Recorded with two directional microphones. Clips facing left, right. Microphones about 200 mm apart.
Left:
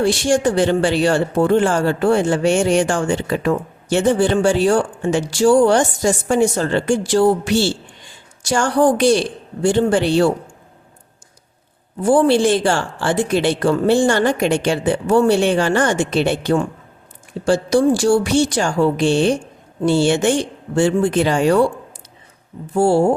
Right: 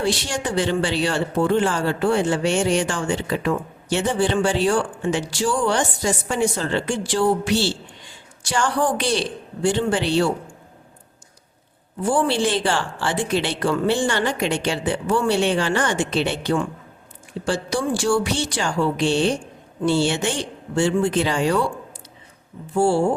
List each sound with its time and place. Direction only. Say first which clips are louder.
0.0 s speech: left 8 dB; 50° left (ahead or behind)
12.0 s speech: left 7 dB; 45° left (ahead or behind)
22.7 s speech: left 3 dB; 40° left (ahead or behind)